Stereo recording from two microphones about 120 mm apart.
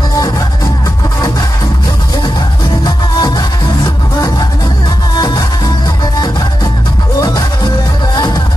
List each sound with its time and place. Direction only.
2.8 s music: 35° left (ahead or behind)